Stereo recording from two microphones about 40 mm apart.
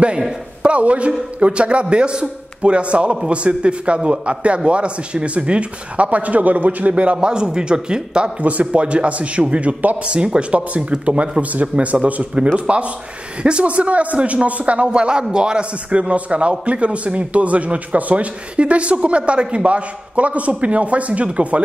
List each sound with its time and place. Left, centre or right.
0.6 s a man's voice: right
7.2 s a man's voice: right
8.4 s a man's voice: right
10.0 s a man's voice: right
14.9 s a man's voice: right